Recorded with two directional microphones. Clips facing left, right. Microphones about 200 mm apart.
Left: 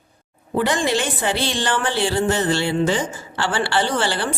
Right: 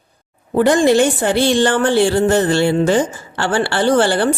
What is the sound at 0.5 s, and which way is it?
A woman's voice, 45° right (ahead or behind).